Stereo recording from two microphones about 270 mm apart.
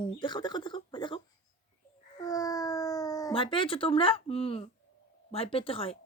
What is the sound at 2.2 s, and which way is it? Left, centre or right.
Speech, centre.